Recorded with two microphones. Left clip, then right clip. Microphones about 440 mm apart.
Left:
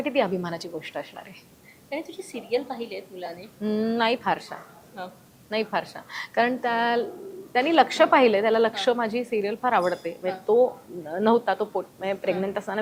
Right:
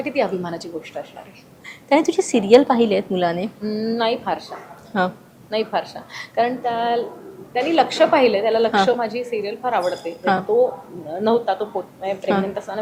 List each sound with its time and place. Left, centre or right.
0.0 s a woman's voice: left
1.9 s a woman's voice: right
3.6 s a woman's voice: left